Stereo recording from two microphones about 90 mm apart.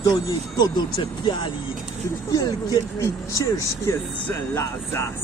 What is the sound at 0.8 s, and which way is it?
Speech, 55° left (ahead or behind).